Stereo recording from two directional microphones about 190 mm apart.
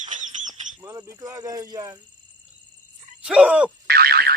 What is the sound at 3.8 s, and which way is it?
Boing, 55° right (ahead or behind).